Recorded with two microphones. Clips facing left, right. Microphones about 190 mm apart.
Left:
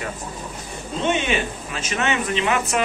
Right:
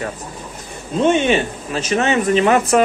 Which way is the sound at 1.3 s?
35° right (ahead or behind).